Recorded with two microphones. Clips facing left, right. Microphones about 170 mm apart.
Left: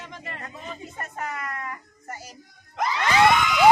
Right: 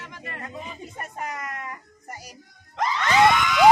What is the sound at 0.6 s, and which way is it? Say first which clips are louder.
Music: left 1 dB; 10° right (ahead or behind).